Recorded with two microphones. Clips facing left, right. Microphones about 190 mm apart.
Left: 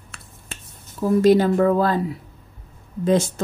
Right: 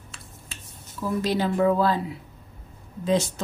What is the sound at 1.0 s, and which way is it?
A woman's voice, 50° left (ahead or behind).